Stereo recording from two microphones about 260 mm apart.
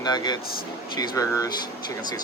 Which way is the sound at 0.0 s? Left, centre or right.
Centre.